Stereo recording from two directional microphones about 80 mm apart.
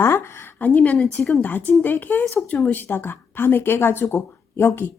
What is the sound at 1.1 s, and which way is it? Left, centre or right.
Speech, centre.